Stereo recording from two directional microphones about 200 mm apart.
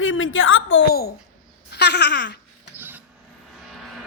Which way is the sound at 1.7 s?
55° left (ahead or behind).